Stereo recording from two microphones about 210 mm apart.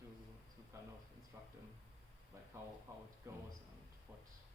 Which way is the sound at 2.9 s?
10° right (ahead or behind).